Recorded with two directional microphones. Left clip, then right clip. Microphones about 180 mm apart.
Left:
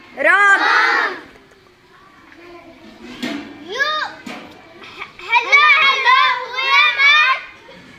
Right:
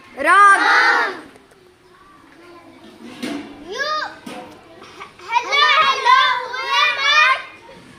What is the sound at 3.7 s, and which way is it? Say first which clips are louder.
Music: left 3 dB; 10° right (ahead or behind).